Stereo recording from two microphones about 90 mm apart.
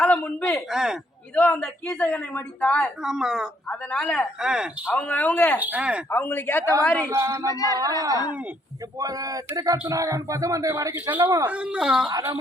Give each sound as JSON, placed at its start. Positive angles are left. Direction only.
{"t": 0.0, "sound": "a sound", "side_deg": 15}
{"t": 0.7, "sound": "speech", "side_deg": -5}
{"t": 1.4, "sound": "a woman's voice", "side_deg": 15}
{"t": 3.0, "sound": "speech", "side_deg": -5}
{"t": 3.7, "sound": "a woman's voice", "side_deg": 10}
{"t": 4.4, "sound": "speech", "side_deg": -10}
{"t": 4.9, "sound": "a woman's voice", "side_deg": 15}
{"t": 5.5, "sound": "speech", "side_deg": -20}
{"t": 6.1, "sound": "speech", "side_deg": 25}
{"t": 7.1, "sound": "speech", "side_deg": -30}
{"t": 7.5, "sound": "speech", "side_deg": 40}
{"t": 7.8, "sound": "speech", "side_deg": -40}
{"t": 11.4, "sound": "speech", "side_deg": -15}
{"t": 12.0, "sound": "speech", "side_deg": -50}